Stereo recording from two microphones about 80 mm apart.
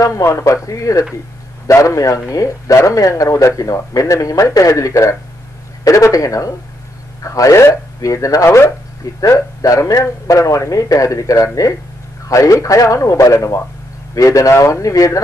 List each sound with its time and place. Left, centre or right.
0.0 s speech: left
9.2 s speech: left